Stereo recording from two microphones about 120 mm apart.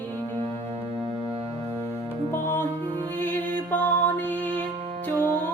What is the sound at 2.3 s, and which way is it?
Music, 20° left (ahead or behind).